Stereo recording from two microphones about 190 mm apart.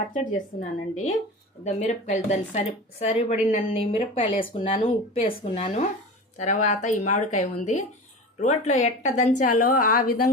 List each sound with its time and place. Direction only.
0.1 s a woman's voice: 40° left (ahead or behind)